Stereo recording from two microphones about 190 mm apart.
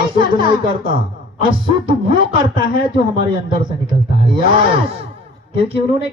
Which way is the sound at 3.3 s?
25° right (ahead or behind).